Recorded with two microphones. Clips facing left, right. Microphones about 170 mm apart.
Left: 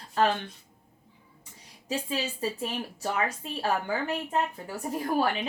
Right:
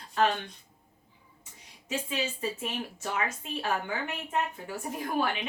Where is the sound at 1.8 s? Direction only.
35° left (ahead or behind).